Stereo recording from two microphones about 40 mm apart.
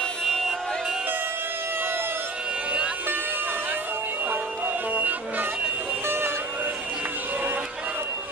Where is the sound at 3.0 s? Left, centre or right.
Right.